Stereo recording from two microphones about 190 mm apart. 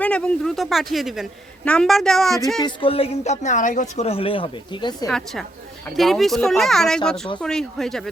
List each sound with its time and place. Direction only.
0.0 s a woman's voice: 5° left (ahead or behind)
2.6 s speech: 25° left (ahead or behind)
5.0 s a woman's voice: centre (ahead or behind)